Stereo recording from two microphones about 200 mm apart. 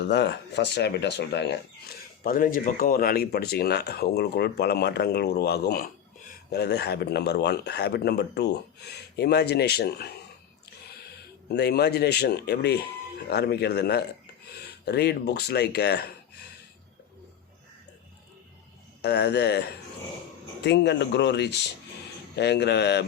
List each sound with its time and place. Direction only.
0.0 s speech: 60° left (ahead or behind)
2.2 s speech: 45° left (ahead or behind)
11.4 s speech: 55° left (ahead or behind)
19.0 s speech: 55° left (ahead or behind)